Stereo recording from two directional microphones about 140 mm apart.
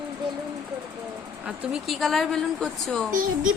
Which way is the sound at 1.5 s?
5° right (ahead or behind).